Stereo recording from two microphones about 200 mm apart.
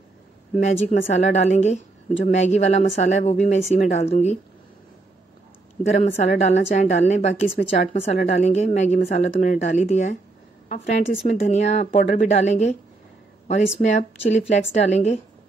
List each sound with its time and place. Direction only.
0.6 s a woman's voice: 35° left (ahead or behind)
5.9 s a woman's voice: 35° left (ahead or behind)